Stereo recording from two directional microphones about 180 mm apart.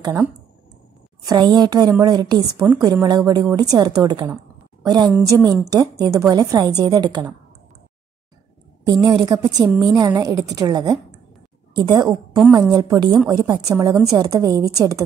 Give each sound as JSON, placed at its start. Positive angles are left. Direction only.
{"t": 1.2, "sound": "a woman's voice", "side_deg": -20}
{"t": 2.6, "sound": "a woman's voice", "side_deg": -10}
{"t": 2.9, "sound": "a woman's voice", "side_deg": -20}
{"t": 9.0, "sound": "a woman's voice", "side_deg": -25}